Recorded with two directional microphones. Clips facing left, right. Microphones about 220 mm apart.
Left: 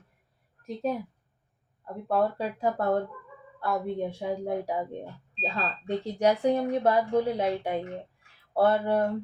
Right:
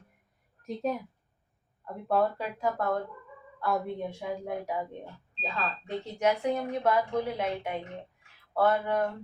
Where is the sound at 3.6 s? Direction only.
Centre (ahead or behind).